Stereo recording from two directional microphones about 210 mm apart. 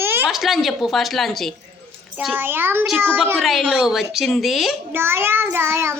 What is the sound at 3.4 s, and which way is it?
A child's voice, centre (ahead or behind).